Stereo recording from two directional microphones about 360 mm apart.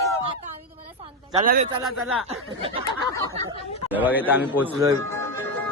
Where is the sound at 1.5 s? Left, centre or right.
Right.